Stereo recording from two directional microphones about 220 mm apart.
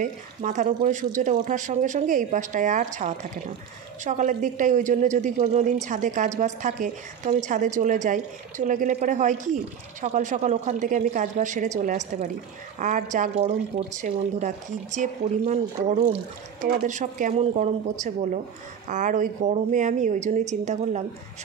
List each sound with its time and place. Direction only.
0.0 s a man's voice: 35° right (ahead or behind)